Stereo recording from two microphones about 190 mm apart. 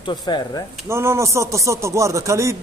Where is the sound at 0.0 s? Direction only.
25° left (ahead or behind).